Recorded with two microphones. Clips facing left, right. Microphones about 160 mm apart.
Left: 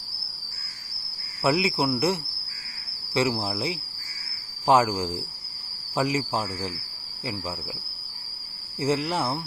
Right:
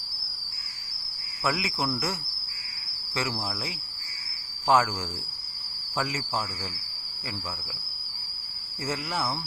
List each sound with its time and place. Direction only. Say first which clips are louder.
1.5 s cricket: left 6 dB; 20° left (ahead or behind)
3.2 s cricket: left 7 dB; 20° left (ahead or behind)
8.8 s cricket: left 6 dB; 20° left (ahead or behind)